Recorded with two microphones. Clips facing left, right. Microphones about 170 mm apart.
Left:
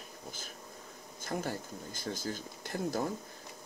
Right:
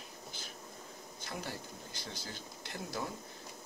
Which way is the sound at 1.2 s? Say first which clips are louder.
Left 7 dB; 45° left (ahead or behind).